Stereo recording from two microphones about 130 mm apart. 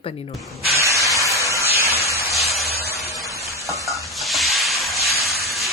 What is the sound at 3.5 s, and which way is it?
Stir, 25° right (ahead or behind).